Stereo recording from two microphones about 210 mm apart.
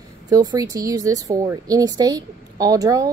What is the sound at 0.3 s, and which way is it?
A woman's voice, 15° right (ahead or behind).